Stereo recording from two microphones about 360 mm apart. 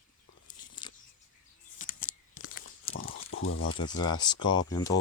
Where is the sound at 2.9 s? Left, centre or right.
Left.